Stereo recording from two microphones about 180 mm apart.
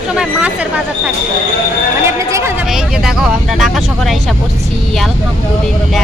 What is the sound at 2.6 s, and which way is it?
Speech, 5° right (ahead or behind).